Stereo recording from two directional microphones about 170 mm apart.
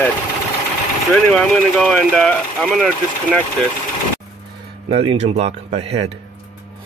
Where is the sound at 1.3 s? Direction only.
5° left (ahead or behind).